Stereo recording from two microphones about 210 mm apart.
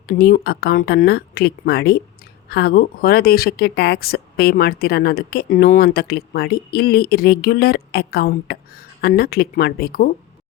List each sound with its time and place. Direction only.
0.1 s speech: 45° left (ahead or behind)